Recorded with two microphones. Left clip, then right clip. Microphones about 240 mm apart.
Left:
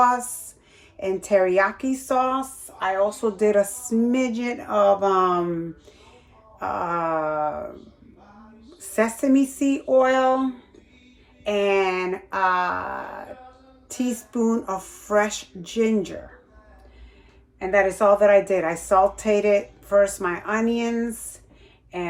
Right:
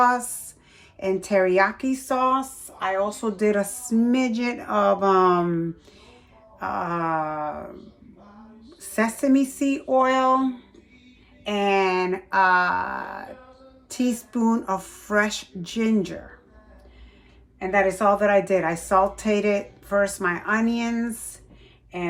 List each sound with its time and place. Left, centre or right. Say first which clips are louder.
0.9 s a woman's voice: left 1 dB; centre
6.6 s a woman's voice: left 1 dB; centre
8.8 s a woman's voice: left 1 dB; centre
17.6 s a woman's voice: left 2 dB; centre